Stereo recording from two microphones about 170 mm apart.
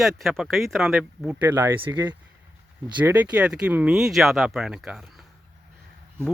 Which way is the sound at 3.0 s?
10° right (ahead or behind).